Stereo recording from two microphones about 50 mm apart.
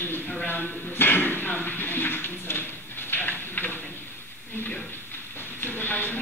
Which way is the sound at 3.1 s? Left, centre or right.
Left.